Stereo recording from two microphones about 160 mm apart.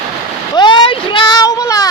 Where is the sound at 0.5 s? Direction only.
30° left (ahead or behind).